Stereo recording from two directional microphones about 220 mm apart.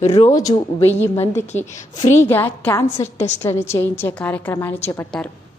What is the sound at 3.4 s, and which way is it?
A woman's voice, 10° left (ahead or behind).